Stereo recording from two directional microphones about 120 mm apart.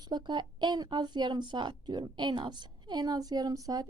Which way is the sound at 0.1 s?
40° right (ahead or behind).